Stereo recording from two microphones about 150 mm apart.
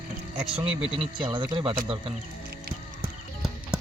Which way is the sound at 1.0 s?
35° right (ahead or behind).